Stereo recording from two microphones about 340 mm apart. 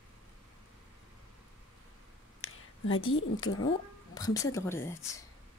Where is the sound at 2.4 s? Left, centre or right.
Left.